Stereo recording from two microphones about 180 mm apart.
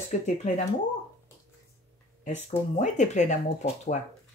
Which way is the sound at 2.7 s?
45° left (ahead or behind).